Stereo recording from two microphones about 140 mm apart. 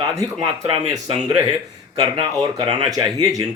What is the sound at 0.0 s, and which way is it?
Speech, 25° right (ahead or behind).